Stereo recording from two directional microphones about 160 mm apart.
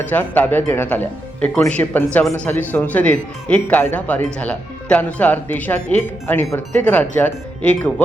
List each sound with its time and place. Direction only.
0.1 s speech: 10° left (ahead or behind)